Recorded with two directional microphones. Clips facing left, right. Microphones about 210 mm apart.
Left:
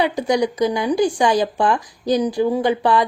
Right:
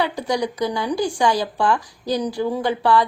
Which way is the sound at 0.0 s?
15° left (ahead or behind).